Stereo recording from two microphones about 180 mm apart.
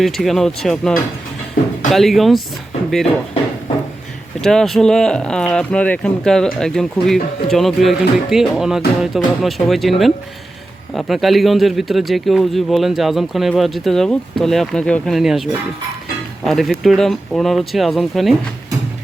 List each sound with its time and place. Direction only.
0.0 s speech: centre (ahead or behind)
1.6 s speech: 55° left (ahead or behind)
1.9 s speech: centre (ahead or behind)
4.4 s speech: 5° left (ahead or behind)
16.5 s speech: centre (ahead or behind)